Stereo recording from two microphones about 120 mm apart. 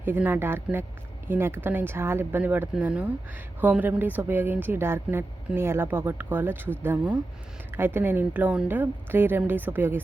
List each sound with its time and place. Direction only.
0.0 s a woman's voice: 15° right (ahead or behind)